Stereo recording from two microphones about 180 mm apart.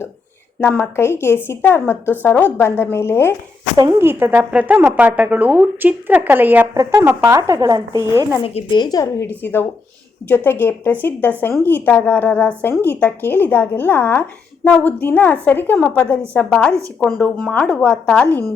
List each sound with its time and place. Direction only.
0.6 s a woman's voice: 10° left (ahead or behind)
3.8 s a woman's voice: 15° right (ahead or behind)
8.4 s a woman's voice: 30° left (ahead or behind); by 18.4 s 5° left (ahead or behind)